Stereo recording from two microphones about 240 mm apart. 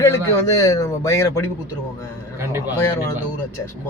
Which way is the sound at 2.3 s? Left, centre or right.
Centre.